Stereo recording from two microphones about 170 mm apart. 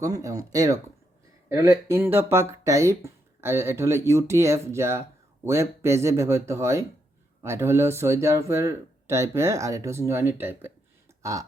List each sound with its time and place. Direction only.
0.0 s speech: 20° right (ahead or behind)